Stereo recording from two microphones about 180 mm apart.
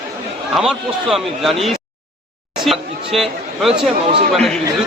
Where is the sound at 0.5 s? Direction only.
Centre (ahead or behind).